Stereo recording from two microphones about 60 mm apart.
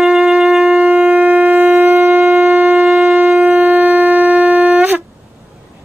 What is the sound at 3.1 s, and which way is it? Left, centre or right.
Shofar, right.